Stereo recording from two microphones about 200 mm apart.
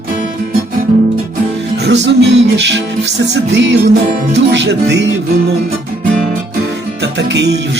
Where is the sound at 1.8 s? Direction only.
60° right (ahead or behind).